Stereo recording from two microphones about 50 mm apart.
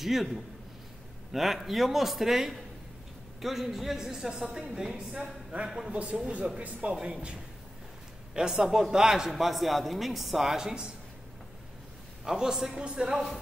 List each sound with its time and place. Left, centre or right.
0.0 s a woman's voice: centre
4.9 s a man's voice: right
8.4 s a woman's voice: centre
12.3 s a woman's voice: centre